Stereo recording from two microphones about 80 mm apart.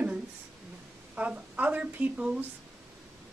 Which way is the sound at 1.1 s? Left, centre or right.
Centre.